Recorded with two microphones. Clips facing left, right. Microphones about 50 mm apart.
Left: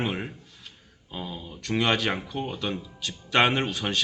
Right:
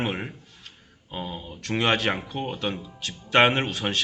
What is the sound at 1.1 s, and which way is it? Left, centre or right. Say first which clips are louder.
Speech: right 2 dB; right.